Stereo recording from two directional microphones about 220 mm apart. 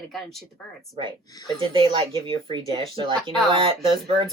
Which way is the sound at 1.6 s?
20° right (ahead or behind).